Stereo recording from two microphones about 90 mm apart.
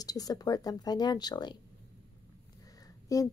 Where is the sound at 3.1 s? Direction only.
40° left (ahead or behind).